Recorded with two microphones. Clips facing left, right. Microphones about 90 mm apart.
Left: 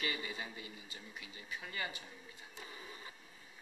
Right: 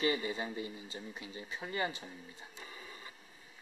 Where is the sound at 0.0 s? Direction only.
30° right (ahead or behind).